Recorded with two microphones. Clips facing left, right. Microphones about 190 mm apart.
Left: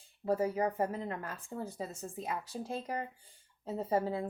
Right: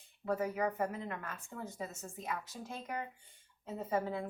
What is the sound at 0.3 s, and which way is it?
A woman's voice, 30° left (ahead or behind).